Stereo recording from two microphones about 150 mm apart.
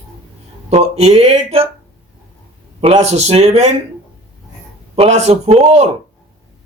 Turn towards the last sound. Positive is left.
turn(degrees=-45)  # may be behind; listen again after turning